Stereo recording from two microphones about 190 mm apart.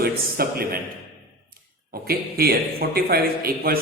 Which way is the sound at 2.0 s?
55° right (ahead or behind).